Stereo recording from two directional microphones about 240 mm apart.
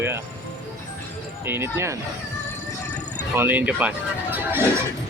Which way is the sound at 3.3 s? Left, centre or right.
Centre.